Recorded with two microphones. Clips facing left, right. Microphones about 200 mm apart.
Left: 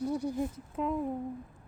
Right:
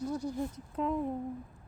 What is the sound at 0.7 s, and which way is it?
Speech, centre (ahead or behind).